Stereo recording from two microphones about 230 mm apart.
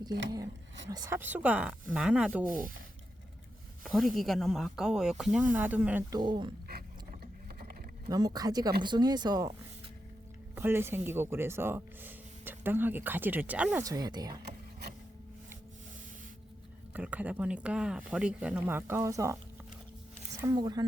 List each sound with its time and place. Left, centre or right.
0.9 s speech: centre
2.5 s speech: right
4.1 s speech: centre
8.0 s speech: centre
14.4 s a sound: right
16.9 s speech: centre
20.4 s speech: centre